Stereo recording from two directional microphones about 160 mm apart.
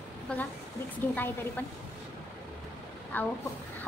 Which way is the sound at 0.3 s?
5° left (ahead or behind).